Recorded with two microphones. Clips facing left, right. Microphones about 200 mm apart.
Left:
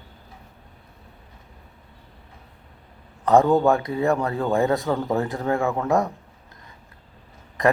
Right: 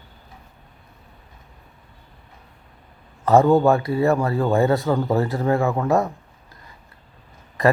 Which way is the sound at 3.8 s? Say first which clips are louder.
Right 4 dB; 15° left (ahead or behind).